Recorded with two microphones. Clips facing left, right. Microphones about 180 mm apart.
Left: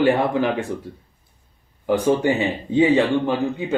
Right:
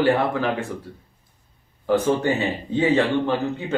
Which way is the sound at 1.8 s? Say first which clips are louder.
Left 2 dB; 15° left (ahead or behind).